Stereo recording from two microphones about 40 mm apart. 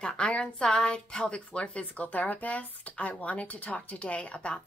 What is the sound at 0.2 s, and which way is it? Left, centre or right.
A woman's voice, left.